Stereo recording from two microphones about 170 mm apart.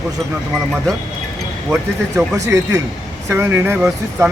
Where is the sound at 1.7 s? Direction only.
10° right (ahead or behind).